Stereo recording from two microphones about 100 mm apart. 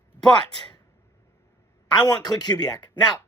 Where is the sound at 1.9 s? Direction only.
45° left (ahead or behind).